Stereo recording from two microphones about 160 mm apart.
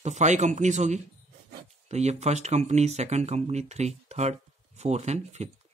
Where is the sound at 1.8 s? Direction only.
45° right (ahead or behind).